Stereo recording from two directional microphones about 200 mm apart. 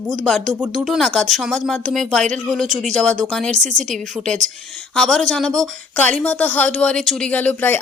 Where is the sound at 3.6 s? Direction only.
35° right (ahead or behind).